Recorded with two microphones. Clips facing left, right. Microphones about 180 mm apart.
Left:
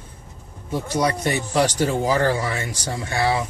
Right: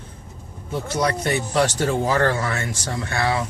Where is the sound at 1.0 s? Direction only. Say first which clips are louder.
Right 1 dB; 10° left (ahead or behind).